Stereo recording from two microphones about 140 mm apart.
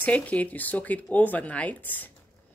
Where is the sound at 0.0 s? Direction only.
10° left (ahead or behind).